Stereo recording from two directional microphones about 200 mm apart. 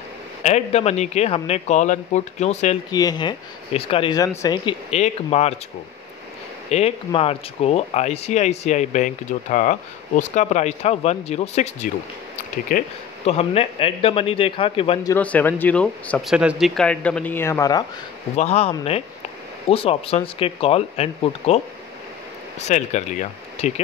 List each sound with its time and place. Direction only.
0.4 s speech: 35° left (ahead or behind)
2.9 s speech: 20° left (ahead or behind)
4.9 s speech: 30° left (ahead or behind)
6.7 s speech: 30° left (ahead or behind)
12.7 s speech: 45° left (ahead or behind)
13.2 s speech: 30° left (ahead or behind)
15.0 s speech: 10° left (ahead or behind)
18.3 s speech: 30° left (ahead or behind)
22.7 s speech: 35° left (ahead or behind)